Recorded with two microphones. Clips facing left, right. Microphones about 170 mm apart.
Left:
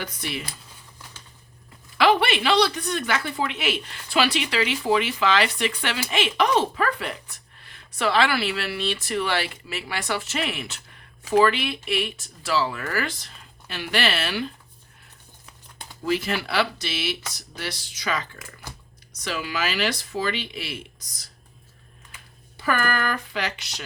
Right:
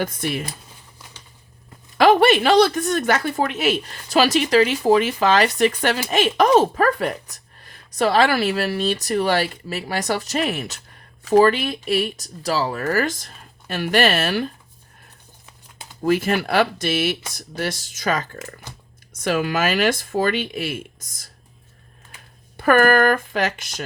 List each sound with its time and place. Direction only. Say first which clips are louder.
0.0 s speech: right 8 dB; 50° right (ahead or behind)
2.0 s a woman's voice: right 6 dB; 45° right (ahead or behind)
16.0 s speech: right 6 dB; 50° right (ahead or behind)
22.5 s speech: right 10 dB; 55° right (ahead or behind)